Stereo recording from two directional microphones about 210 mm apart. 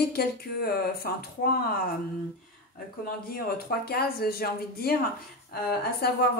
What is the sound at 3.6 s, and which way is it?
A woman's voice, 45° left (ahead or behind).